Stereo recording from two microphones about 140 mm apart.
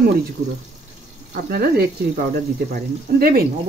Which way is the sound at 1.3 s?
90° right.